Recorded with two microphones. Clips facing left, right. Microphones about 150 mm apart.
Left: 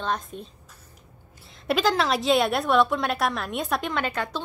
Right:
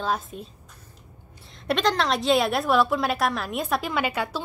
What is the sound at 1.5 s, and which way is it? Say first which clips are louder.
A woman's voice: left 1 dB; centre (ahead or behind).